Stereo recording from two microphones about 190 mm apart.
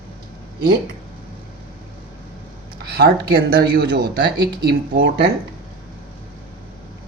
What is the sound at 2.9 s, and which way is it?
Speech, 55° right (ahead or behind).